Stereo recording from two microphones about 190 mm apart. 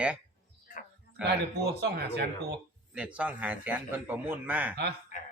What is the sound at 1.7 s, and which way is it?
Speech, 60° right (ahead or behind).